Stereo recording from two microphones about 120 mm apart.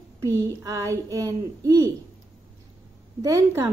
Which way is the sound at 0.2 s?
25° right (ahead or behind).